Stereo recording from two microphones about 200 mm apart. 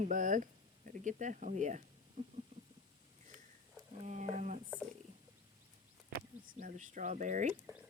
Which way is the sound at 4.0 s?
30° right (ahead or behind).